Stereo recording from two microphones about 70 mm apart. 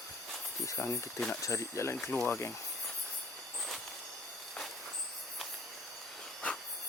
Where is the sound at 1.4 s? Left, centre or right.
Left.